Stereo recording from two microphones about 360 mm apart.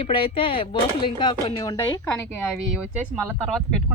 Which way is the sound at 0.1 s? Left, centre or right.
Centre.